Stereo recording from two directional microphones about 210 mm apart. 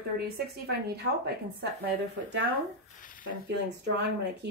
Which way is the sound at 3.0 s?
40° left (ahead or behind).